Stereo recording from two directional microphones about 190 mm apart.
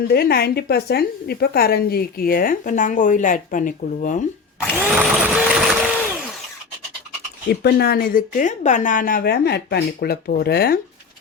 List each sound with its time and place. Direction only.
0.1 s a woman's voice: 55° left (ahead or behind)
4.8 s vehicle: 10° right (ahead or behind)
7.5 s a woman's voice: 55° left (ahead or behind)